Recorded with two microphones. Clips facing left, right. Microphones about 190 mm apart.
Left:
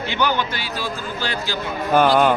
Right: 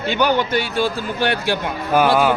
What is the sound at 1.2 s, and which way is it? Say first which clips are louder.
Speech: right 9 dB; 65° right (ahead or behind).